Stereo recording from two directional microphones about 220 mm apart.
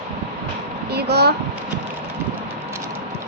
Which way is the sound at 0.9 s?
50° right (ahead or behind).